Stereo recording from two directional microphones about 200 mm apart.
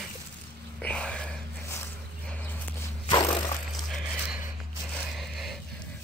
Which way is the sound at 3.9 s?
5° right (ahead or behind).